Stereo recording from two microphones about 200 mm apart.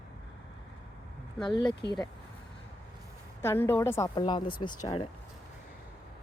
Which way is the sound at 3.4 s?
10° left (ahead or behind).